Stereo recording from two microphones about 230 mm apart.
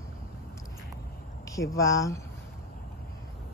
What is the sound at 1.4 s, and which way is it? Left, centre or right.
Speech, centre.